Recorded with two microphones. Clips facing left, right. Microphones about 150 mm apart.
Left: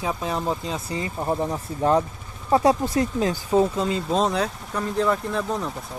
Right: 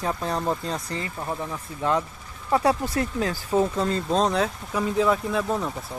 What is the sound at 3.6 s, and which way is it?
Speech, 5° left (ahead or behind).